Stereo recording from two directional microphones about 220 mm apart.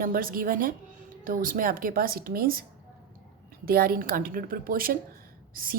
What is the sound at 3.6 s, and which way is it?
Speech, 45° right (ahead or behind).